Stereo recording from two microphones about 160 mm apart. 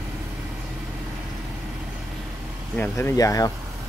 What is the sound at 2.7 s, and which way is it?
Speech, 10° left (ahead or behind).